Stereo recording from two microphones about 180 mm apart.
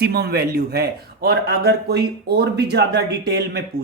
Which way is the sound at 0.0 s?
65° right (ahead or behind).